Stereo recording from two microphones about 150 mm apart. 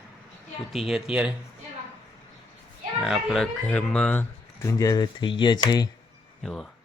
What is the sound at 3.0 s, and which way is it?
Speech, centre (ahead or behind).